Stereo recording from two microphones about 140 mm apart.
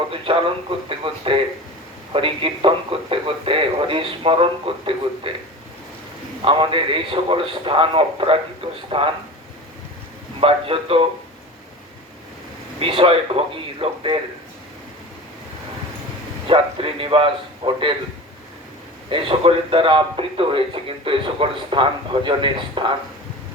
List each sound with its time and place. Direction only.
0.1 s speech: 40° right (ahead or behind)
6.4 s speech: 40° right (ahead or behind)
10.4 s a man's voice: 45° right (ahead or behind)
12.8 s speech: 40° right (ahead or behind)
16.5 s speech: 40° right (ahead or behind)
19.1 s speech: 40° right (ahead or behind)